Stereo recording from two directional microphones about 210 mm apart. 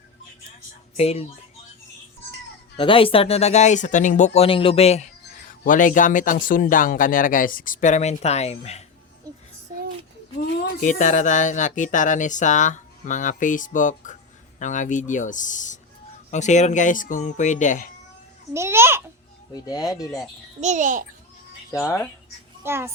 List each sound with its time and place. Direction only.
0.9 s speech: 30° left (ahead or behind)
2.7 s speech: 25° left (ahead or behind)
10.8 s speech: 35° left (ahead or behind)
18.5 s a child's voice: 10° right (ahead or behind)
19.5 s speech: 20° left (ahead or behind)
20.6 s a child's voice: 35° right (ahead or behind)
21.7 s speech: 15° left (ahead or behind)
22.6 s a child's voice: 10° right (ahead or behind)